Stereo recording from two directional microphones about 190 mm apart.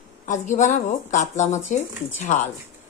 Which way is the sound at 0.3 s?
40° left (ahead or behind).